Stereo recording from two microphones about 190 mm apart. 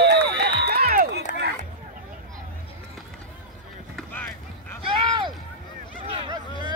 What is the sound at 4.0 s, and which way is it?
Run, 10° left (ahead or behind).